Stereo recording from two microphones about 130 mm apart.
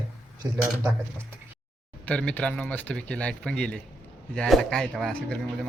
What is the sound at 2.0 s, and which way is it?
Speech, 10° left (ahead or behind).